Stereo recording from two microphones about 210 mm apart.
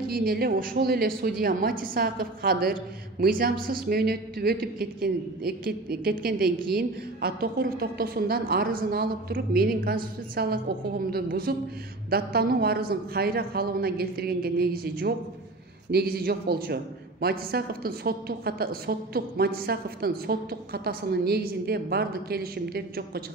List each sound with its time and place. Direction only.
0.1 s a man's voice: 45° right (ahead or behind)